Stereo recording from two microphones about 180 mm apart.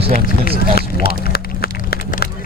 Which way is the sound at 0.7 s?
55° left (ahead or behind).